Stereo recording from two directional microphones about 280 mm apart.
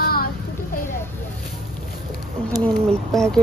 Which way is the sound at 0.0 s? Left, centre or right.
Left.